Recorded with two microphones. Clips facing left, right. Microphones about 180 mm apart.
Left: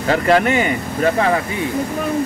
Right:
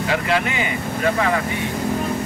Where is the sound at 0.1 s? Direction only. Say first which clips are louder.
Left 8 dB; 45° left (ahead or behind).